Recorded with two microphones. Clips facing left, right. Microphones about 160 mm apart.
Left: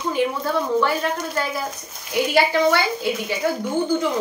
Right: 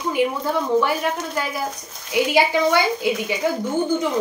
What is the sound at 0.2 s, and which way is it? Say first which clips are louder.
A woman's voice: right 1 dB; 15° right (ahead or behind).